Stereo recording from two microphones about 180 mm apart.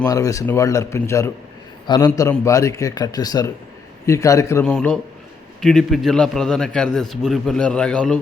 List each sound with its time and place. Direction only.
0.0 s a man's voice: 20° left (ahead or behind)